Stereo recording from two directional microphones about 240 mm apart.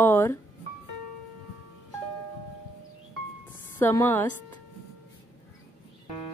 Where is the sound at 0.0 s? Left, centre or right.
Centre.